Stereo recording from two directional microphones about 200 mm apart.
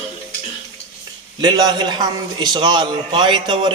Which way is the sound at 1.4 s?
20° right (ahead or behind).